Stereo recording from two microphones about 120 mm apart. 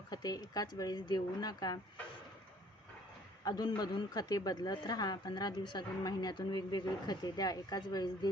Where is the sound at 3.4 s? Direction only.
35° left (ahead or behind).